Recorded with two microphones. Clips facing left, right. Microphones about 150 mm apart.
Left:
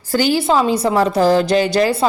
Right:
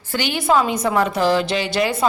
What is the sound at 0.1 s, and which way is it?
A woman's voice, 40° left (ahead or behind).